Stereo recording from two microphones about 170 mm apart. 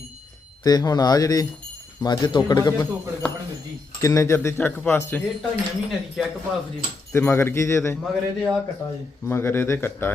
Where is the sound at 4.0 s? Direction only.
20° left (ahead or behind).